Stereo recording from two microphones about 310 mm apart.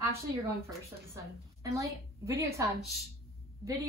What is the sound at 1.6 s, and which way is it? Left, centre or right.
A woman's voice, centre.